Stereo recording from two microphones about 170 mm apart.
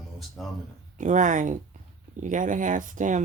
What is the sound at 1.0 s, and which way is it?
Speech, 45° right (ahead or behind).